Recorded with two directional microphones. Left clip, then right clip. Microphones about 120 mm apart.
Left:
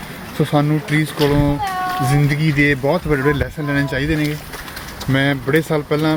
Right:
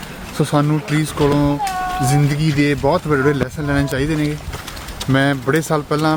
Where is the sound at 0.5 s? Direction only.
35° right (ahead or behind).